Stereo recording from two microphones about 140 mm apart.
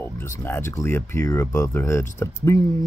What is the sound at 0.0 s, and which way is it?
Speech, 20° left (ahead or behind).